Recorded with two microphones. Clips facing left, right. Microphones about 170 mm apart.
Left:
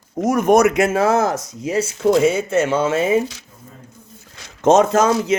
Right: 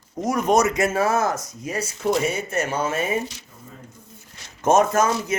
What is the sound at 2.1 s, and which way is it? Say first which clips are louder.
Speech: left 7 dB; 90° left.